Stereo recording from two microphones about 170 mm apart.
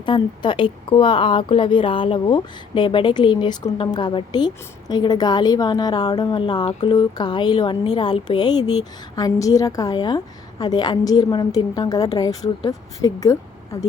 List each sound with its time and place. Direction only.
0.0 s speech: 25° left (ahead or behind)